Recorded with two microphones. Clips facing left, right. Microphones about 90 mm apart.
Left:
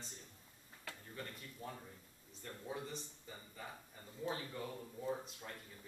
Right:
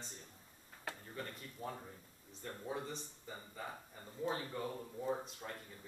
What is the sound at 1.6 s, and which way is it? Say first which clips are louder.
Speech: right 5 dB; 25° right (ahead or behind).